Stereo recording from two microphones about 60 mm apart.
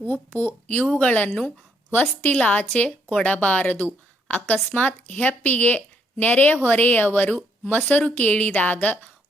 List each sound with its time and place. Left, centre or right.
0.1 s a woman's voice: left